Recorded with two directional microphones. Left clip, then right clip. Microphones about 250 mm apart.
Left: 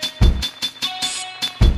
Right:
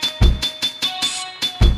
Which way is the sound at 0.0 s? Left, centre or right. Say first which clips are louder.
Right 3 dB; centre.